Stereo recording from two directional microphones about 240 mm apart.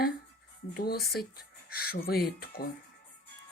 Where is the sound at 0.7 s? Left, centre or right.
Left.